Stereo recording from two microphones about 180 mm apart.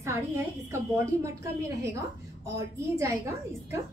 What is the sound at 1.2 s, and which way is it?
A woman's voice, 15° right (ahead or behind).